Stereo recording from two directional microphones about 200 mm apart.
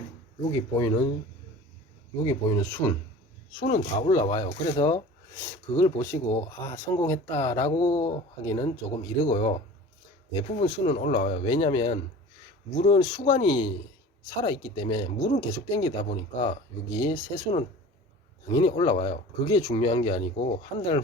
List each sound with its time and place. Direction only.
0.8 s speech: 20° left (ahead or behind)
2.2 s speech: 15° left (ahead or behind)
3.6 s speech: 35° left (ahead or behind)
4.1 s speech: 15° left (ahead or behind)
18.8 s speech: 25° left (ahead or behind)